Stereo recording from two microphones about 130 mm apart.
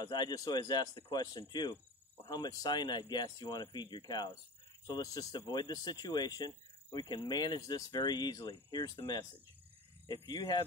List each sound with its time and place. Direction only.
0.0 s speech: 35° left (ahead or behind)